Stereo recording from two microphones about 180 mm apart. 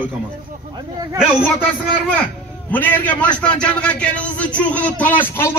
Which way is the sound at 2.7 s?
10° left (ahead or behind).